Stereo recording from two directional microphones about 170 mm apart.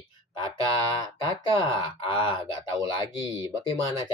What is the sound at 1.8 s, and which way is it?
Speech, 30° left (ahead or behind).